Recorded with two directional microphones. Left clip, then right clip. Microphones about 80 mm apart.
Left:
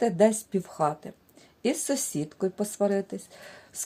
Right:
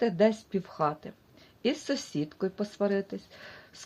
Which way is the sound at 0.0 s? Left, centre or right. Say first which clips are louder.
Left 3 dB; left.